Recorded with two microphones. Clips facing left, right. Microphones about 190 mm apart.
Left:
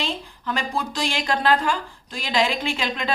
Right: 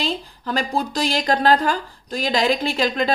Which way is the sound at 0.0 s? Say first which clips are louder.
Right 3 dB; 35° right (ahead or behind).